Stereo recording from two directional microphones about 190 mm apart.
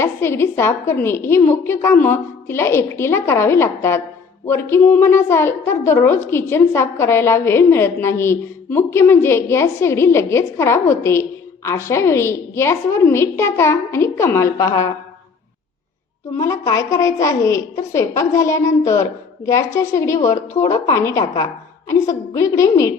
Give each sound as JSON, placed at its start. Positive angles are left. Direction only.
{"t": 0.0, "sound": "a woman's voice", "side_deg": 10}
{"t": 16.3, "sound": "a woman's voice", "side_deg": 15}